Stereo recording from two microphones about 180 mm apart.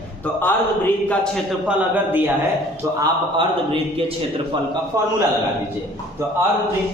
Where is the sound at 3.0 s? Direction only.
25° right (ahead or behind).